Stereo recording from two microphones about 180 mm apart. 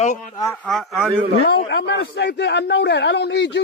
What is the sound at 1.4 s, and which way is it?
A man's voice, 70° left (ahead or behind).